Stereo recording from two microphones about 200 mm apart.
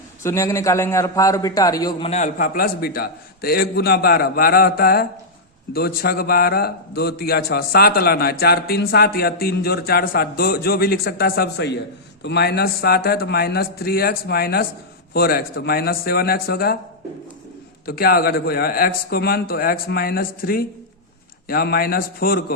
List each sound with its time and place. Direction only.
0.2 s a man's voice: 15° left (ahead or behind)
2.0 s a man's voice: 35° left (ahead or behind)
17.8 s a man's voice: 50° left (ahead or behind)